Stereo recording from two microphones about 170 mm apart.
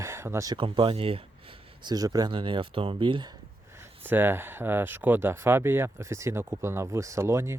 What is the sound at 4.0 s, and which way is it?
Speech, 10° right (ahead or behind).